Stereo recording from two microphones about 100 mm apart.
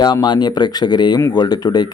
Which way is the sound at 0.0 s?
40° left (ahead or behind).